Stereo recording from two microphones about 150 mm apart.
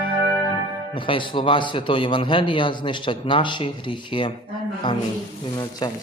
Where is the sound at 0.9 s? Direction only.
35° left (ahead or behind).